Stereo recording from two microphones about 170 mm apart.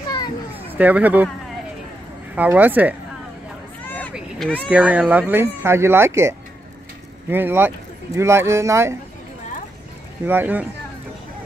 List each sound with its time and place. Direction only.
0.7 s speech: 10° right (ahead or behind)
2.3 s speech: 10° right (ahead or behind)
3.8 s a sound: 10° left (ahead or behind)
4.6 s speech: 10° right (ahead or behind)
10.2 s speech: 10° right (ahead or behind)